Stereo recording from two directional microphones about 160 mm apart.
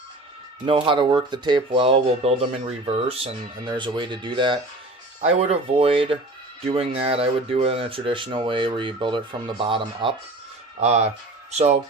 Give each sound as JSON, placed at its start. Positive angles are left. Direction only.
{"t": 0.6, "sound": "speech", "side_deg": -35}
{"t": 10.8, "sound": "speech", "side_deg": -45}